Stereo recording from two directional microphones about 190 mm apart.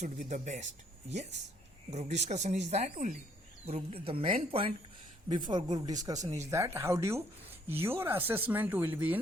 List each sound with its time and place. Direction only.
0.0 s speech: 40° right (ahead or behind); by 9.1 s 10° right (ahead or behind)